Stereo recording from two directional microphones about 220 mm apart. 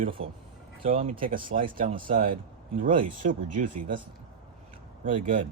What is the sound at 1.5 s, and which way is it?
Speech, 70° right (ahead or behind).